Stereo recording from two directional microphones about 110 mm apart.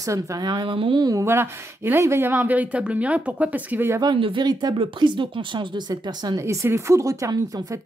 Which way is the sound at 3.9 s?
45° right (ahead or behind).